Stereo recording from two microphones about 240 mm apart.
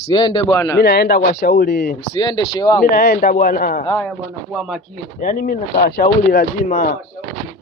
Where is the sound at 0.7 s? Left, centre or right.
Left.